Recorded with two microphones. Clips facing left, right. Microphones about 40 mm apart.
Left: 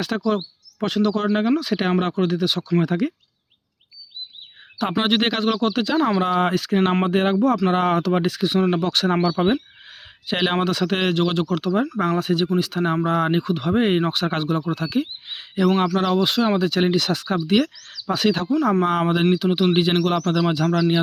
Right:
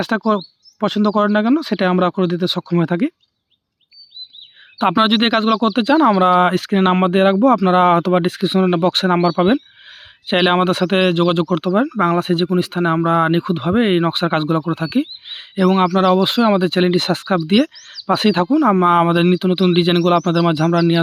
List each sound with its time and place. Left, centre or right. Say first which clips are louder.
0.3 s speech: right 5 dB; right
2.8 s speech: right 4 dB; right
4.8 s speech: right 6 dB; right
5.5 s speech: right 5 dB; right
5.7 s speech: right 7 dB; right
6.1 s speech: right 7 dB; right
11.7 s speech: right 6 dB; right
13.4 s speech: right 4 dB; right
13.7 s speech: right 4 dB; right
16.2 s speech: right 5 dB; right
20.4 s speech: right 5 dB; right